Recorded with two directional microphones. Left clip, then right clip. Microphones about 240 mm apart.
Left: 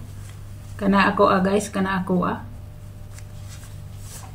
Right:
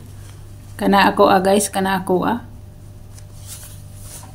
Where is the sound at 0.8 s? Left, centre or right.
Right.